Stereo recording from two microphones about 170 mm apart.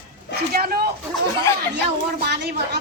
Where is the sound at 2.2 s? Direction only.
80° right.